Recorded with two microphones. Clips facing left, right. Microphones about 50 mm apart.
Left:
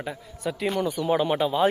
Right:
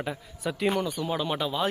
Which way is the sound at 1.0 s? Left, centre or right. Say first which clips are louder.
Left 6 dB; centre.